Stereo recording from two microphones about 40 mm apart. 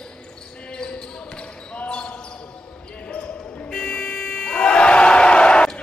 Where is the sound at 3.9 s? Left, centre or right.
Left.